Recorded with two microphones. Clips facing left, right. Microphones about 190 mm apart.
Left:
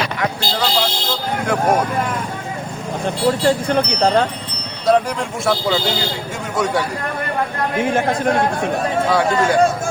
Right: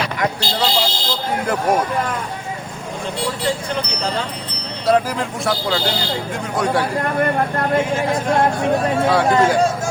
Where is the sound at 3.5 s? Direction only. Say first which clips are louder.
Left 6 dB; 55° left (ahead or behind).